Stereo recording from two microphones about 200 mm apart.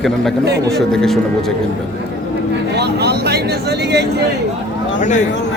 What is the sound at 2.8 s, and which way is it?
Speech, 55° right (ahead or behind).